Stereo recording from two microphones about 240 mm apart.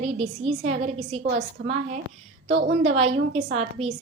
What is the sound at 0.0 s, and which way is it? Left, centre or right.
A woman's voice, right.